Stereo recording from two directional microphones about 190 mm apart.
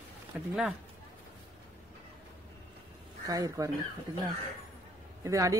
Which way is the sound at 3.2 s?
15° right (ahead or behind).